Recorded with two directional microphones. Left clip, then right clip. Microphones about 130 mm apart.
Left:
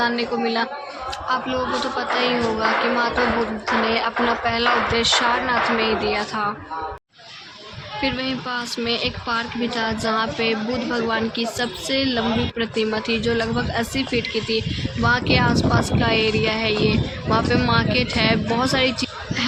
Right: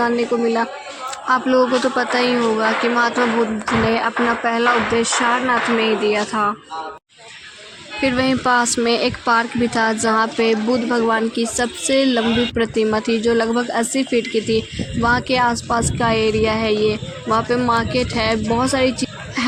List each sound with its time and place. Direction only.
0.0 s a woman's voice: 35° right (ahead or behind)
1.3 s speech: 50° right (ahead or behind)
8.0 s a woman's voice: 80° right; by 19.1 s 35° right (ahead or behind)